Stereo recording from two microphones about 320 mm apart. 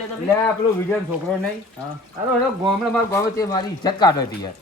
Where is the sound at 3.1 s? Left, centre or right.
Centre.